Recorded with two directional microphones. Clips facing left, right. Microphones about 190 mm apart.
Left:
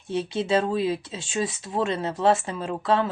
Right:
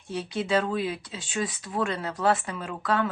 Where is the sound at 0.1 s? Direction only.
25° left (ahead or behind).